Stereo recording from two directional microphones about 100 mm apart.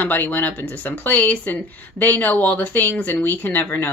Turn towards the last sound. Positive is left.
turn(degrees=20)  # may be behind; listen again after turning